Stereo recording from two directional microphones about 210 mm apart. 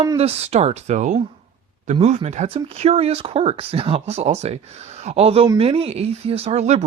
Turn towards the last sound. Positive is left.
turn(degrees=-30)  # may be behind; listen again after turning